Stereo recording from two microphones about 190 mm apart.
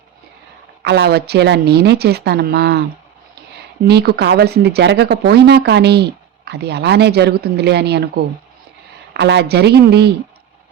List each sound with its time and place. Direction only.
0.8 s speech: 60° right (ahead or behind)
3.8 s speech: 60° right (ahead or behind)
9.1 s speech: 65° right (ahead or behind)